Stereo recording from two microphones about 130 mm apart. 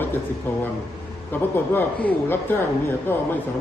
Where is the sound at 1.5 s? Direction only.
15° left (ahead or behind).